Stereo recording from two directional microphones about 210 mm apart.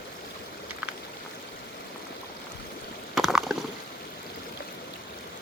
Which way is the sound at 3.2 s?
Centre (ahead or behind).